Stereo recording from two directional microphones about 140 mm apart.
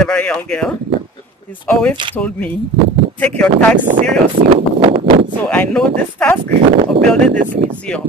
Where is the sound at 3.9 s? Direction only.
65° right (ahead or behind).